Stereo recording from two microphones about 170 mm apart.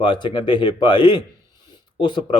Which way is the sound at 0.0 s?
30° left (ahead or behind).